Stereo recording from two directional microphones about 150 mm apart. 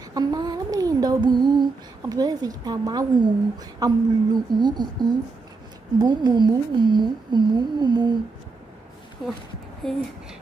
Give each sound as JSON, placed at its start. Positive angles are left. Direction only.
{"t": 0.1, "sound": "a sound", "side_deg": -25}
{"t": 3.8, "sound": "speech", "side_deg": -30}
{"t": 9.2, "sound": "speech", "side_deg": 0}